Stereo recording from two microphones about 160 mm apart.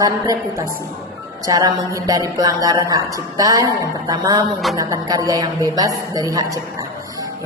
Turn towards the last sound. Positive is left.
turn(degrees=-20)  # may be behind; listen again after turning